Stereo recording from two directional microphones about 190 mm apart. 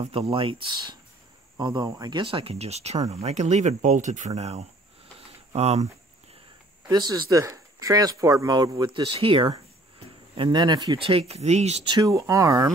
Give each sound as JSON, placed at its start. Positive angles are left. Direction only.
{"t": 0.0, "sound": "speech", "side_deg": -30}
{"t": 6.9, "sound": "speech", "side_deg": -20}
{"t": 11.9, "sound": "speech", "side_deg": -20}